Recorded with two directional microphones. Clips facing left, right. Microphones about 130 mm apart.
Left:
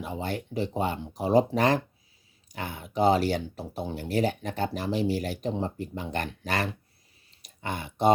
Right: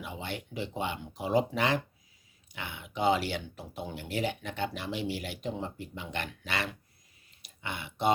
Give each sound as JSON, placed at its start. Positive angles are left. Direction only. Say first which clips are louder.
{"t": 0.0, "sound": "speech", "louder": "left 6 dB", "side_deg": 40}